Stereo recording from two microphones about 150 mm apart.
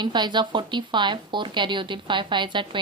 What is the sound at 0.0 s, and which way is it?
A woman's voice, 30° right (ahead or behind).